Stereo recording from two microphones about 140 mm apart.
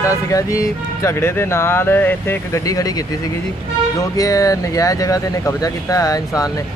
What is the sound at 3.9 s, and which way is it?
Speech, 25° left (ahead or behind).